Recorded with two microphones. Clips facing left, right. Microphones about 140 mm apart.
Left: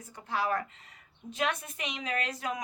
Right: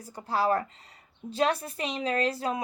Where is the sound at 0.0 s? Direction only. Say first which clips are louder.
Right 5 dB; 35° right (ahead or behind).